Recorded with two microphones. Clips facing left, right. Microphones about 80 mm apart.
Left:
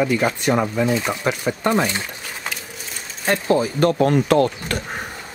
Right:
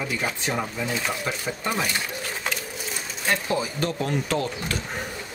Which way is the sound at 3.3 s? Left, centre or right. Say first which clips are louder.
Left 7 dB; left.